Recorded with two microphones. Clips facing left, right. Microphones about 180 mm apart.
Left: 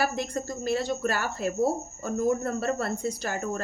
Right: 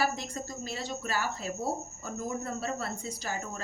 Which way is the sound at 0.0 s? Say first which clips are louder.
Left 4 dB; 60° left (ahead or behind).